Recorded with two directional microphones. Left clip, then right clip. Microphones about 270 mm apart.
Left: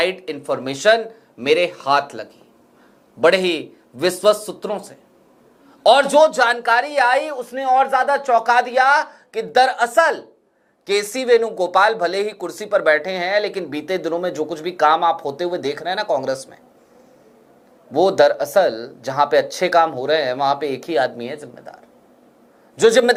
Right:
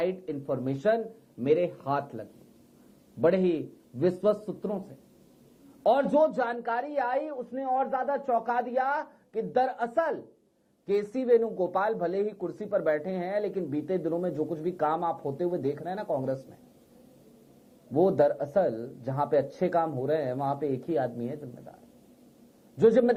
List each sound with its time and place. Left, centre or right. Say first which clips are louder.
0.0 s a man's voice: left 10 dB; centre
4.4 s a man's voice: left 9 dB; left
11.4 s speech: left 9 dB; left
11.7 s a man's voice: left 12 dB; centre
16.0 s speech: left 10 dB; centre
17.9 s speech: left 8 dB; left
18.2 s a man's voice: left 10 dB; centre
19.1 s a man's voice: left 11 dB; centre
22.8 s a man's voice: left 9 dB; centre